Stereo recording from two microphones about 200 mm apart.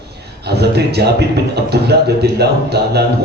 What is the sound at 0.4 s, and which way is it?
Speech, 55° right (ahead or behind).